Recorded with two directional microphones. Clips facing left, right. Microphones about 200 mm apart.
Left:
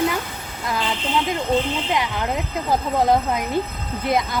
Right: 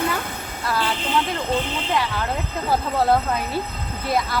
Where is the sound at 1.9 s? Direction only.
15° left (ahead or behind).